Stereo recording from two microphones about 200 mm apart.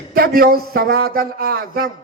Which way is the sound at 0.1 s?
45° right (ahead or behind).